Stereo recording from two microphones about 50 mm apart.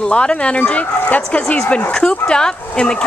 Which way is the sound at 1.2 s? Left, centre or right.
Centre.